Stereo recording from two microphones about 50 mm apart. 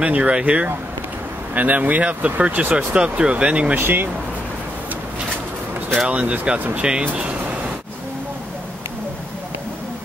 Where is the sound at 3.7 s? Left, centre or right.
Right.